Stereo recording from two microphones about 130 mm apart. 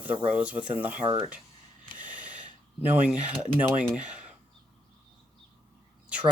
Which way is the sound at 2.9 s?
10° right (ahead or behind).